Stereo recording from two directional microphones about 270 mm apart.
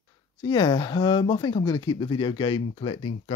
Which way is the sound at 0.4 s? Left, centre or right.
Centre.